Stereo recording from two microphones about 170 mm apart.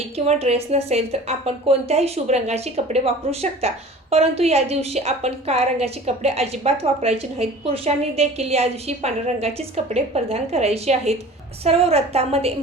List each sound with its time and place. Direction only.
0.3 s a woman's voice: 35° right (ahead or behind)